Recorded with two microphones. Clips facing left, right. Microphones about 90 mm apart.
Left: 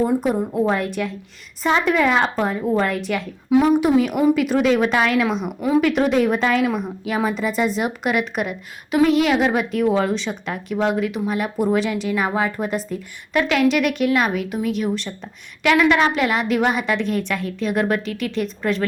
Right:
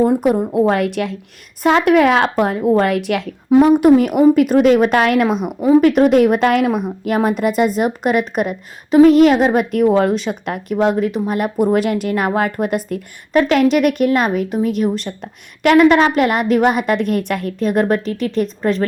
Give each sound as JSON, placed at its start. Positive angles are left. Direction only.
{"t": 0.0, "sound": "a woman's voice", "side_deg": -60}
{"t": 1.6, "sound": "a woman's voice", "side_deg": -65}
{"t": 3.5, "sound": "a woman's voice", "side_deg": -50}
{"t": 5.5, "sound": "a woman's voice", "side_deg": -35}
{"t": 13.3, "sound": "a woman's voice", "side_deg": -40}